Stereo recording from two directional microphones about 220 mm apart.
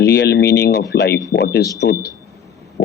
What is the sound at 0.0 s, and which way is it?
Speech, 50° left (ahead or behind).